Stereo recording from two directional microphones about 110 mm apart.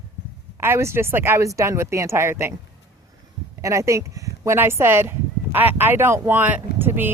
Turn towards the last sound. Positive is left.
turn(degrees=-20)  # may be behind; listen again after turning